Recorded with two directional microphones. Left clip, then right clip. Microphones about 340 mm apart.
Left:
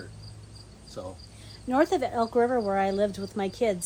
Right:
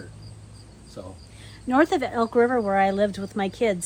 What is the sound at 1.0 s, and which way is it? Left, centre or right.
Speech, centre.